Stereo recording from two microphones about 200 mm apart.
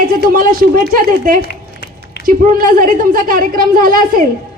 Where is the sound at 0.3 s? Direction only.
45° right (ahead or behind).